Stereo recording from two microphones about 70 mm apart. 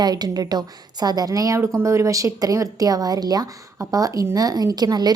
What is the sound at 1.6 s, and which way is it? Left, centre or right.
A woman's voice, right.